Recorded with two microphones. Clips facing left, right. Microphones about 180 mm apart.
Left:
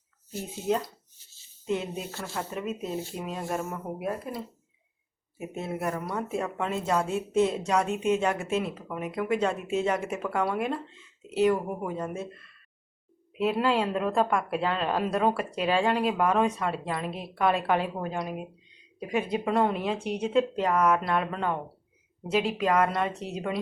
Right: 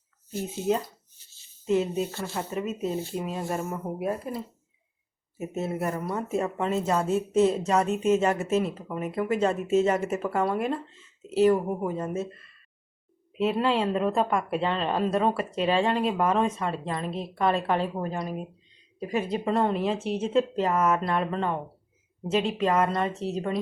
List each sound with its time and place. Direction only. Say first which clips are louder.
1.6 s speech: right 6 dB; centre (ahead or behind)
5.5 s speech: right 2 dB; 5° right (ahead or behind)
13.3 s speech: right 1 dB; centre (ahead or behind)